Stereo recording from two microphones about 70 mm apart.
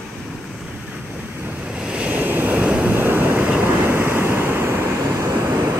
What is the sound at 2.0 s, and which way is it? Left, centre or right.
Vehicle, right.